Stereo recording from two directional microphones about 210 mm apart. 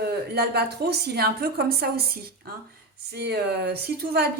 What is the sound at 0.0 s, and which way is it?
A woman's voice, 50° right (ahead or behind).